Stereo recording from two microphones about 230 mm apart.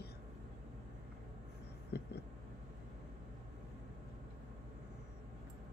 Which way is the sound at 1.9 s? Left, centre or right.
Left.